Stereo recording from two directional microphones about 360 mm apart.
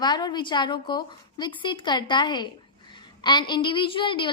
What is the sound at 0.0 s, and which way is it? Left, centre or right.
A woman's voice, centre.